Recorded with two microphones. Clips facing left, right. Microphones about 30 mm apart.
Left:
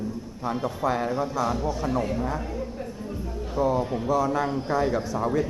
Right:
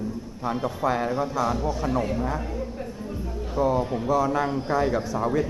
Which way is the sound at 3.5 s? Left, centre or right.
Centre.